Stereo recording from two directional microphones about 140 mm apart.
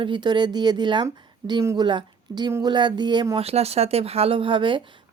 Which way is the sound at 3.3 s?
45° right (ahead or behind).